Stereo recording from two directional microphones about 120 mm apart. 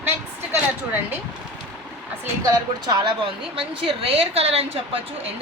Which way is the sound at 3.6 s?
50° right (ahead or behind).